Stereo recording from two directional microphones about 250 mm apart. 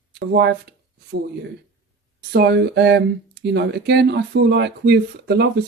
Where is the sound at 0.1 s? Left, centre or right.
Right.